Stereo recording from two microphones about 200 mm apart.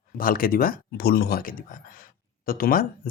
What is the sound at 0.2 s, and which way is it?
Speech, 45° left (ahead or behind).